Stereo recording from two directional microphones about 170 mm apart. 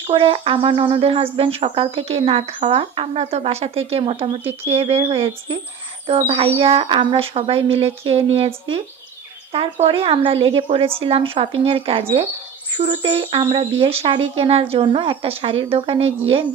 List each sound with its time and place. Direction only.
0.0 s speech: 30° right (ahead or behind)